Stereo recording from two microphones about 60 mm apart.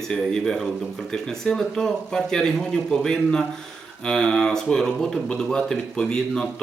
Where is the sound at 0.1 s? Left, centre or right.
Centre.